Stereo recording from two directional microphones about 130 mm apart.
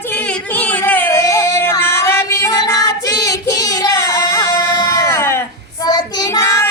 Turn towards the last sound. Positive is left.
turn(degrees=20)  # may be behind; listen again after turning